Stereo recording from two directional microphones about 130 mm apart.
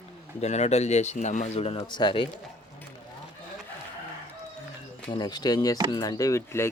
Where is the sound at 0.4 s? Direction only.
60° left (ahead or behind).